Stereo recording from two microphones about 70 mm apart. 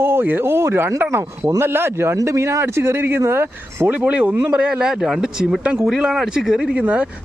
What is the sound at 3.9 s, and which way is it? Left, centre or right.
Speech, centre.